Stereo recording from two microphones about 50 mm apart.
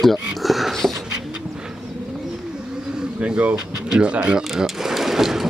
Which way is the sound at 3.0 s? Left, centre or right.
Centre.